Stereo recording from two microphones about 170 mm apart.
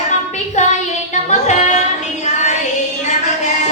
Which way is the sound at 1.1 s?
45° left (ahead or behind).